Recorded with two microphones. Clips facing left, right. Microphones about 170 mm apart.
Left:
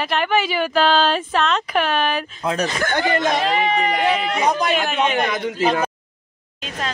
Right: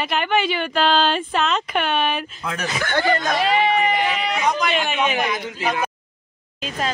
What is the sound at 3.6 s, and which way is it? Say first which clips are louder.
Speech: even; centre (ahead or behind).